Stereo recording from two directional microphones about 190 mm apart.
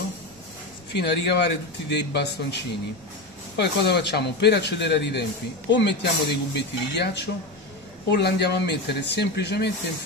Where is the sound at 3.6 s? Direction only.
60° left (ahead or behind).